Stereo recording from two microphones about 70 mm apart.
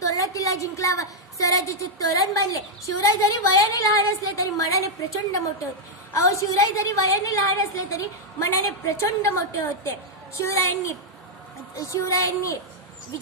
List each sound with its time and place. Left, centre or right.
0.0 s a woman's voice: left